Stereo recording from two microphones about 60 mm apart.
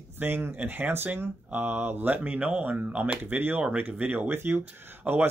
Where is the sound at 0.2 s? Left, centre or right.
Right.